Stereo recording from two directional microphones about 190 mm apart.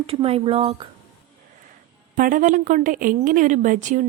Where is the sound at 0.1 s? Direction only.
30° right (ahead or behind).